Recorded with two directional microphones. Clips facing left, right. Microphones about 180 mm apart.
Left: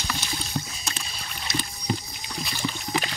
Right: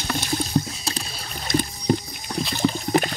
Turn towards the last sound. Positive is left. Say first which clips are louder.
# right 8 dB
turn(degrees=-45)  # may be behind; listen again after turning